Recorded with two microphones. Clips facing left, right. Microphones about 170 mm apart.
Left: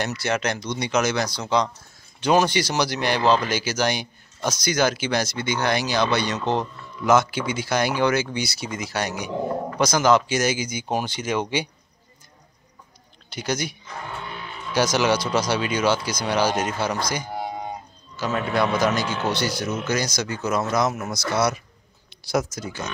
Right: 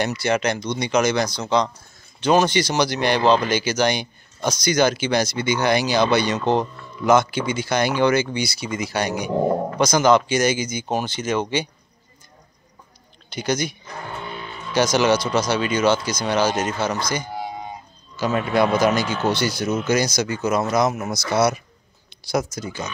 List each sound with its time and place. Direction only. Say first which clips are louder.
0.0 s speech: right 4 dB; centre (ahead or behind)
13.3 s speech: right 3 dB; 5° left (ahead or behind)
17.3 s cat: even; 55° left (ahead or behind)
18.1 s speech: right 3 dB; centre (ahead or behind)
19.9 s speech: right 6 dB; 5° right (ahead or behind)